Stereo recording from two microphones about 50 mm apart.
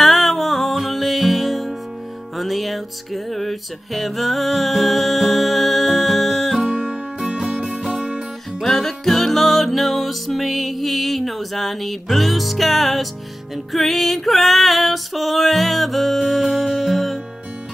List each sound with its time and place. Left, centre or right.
0.0 s music: centre
6.6 s music: centre
8.6 s music: centre